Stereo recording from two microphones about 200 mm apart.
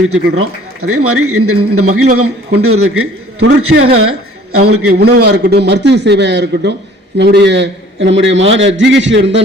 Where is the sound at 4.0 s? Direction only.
90° right.